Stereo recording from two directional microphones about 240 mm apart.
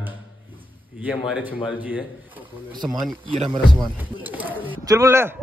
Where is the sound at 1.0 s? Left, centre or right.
Centre.